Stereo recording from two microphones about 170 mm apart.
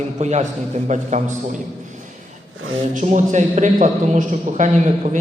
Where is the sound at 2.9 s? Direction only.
45° right (ahead or behind).